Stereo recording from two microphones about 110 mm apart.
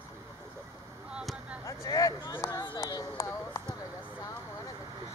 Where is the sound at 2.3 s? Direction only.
40° left (ahead or behind).